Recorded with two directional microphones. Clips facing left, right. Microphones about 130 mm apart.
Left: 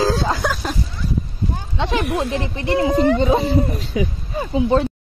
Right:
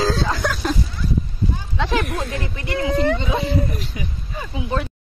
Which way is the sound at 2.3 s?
30° left (ahead or behind).